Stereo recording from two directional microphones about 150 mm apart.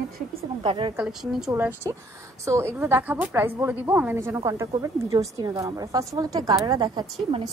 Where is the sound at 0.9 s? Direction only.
5° right (ahead or behind).